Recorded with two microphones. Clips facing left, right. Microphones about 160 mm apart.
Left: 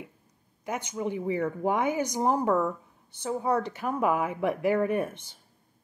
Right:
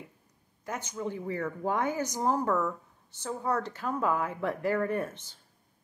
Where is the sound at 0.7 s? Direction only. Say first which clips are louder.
Left 4 dB; 15° left (ahead or behind).